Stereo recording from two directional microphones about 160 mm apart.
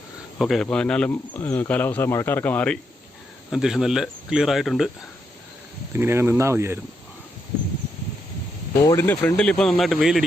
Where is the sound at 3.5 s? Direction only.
Centre (ahead or behind).